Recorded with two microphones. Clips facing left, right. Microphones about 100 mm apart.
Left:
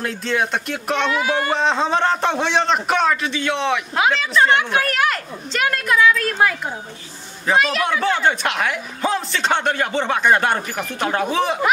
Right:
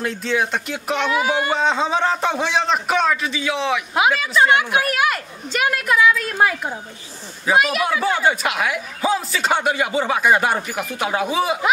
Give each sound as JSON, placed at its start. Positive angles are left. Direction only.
{"t": 0.0, "sound": "speech", "side_deg": 0}
{"t": 3.9, "sound": "a woman's voice", "side_deg": -10}